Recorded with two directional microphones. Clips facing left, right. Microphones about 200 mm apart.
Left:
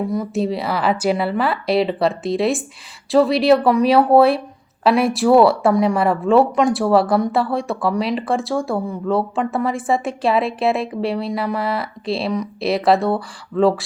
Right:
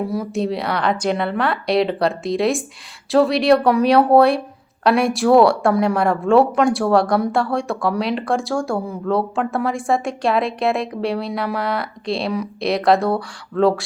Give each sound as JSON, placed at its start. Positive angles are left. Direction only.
{"t": 0.1, "sound": "speech", "side_deg": 0}